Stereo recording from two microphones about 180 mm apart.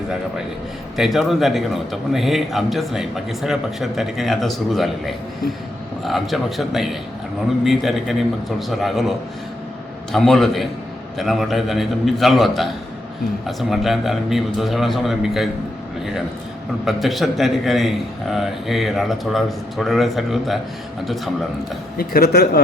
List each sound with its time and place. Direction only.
0.9 s a man's voice: centre (ahead or behind)
16.8 s a man's voice: centre (ahead or behind)
21.9 s speech: 60° left (ahead or behind)